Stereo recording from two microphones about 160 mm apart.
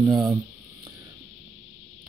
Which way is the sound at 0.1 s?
25° right (ahead or behind).